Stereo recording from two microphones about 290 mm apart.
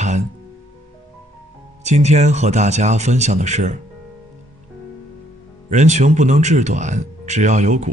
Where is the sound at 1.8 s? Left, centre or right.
Right.